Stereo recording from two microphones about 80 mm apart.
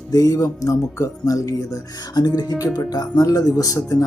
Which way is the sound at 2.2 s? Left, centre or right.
Left.